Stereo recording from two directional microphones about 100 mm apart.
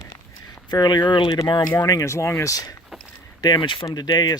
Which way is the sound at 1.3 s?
35° left (ahead or behind).